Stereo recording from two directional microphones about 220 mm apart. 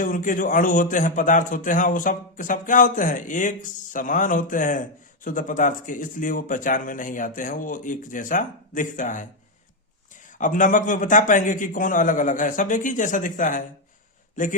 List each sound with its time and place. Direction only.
0.0 s a man's voice: 35° left (ahead or behind)
10.2 s a man's voice: 35° left (ahead or behind)